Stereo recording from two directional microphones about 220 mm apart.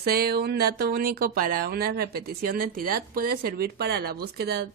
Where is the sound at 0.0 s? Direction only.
45° right (ahead or behind).